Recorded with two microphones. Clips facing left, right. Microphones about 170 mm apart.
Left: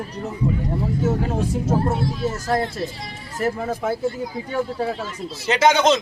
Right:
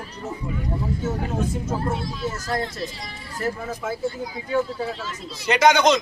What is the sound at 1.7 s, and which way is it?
Speech, 35° left (ahead or behind).